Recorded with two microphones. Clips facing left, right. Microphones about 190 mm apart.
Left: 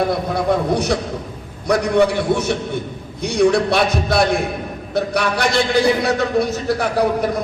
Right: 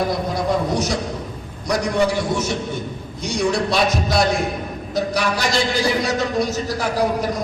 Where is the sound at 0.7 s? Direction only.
60° left (ahead or behind).